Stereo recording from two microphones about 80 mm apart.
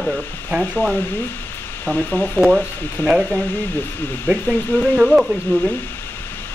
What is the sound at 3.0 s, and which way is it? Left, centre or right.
Speech, centre.